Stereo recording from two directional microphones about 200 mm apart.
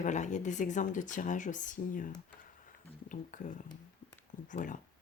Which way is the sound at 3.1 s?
40° left (ahead or behind).